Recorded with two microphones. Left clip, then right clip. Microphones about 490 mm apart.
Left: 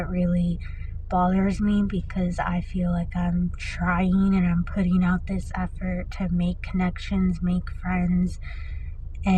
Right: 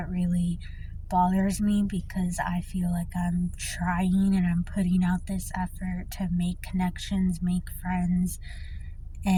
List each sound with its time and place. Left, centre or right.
0.0 s speech: right